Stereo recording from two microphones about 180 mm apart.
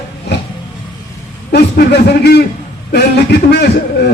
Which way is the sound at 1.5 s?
65° left (ahead or behind).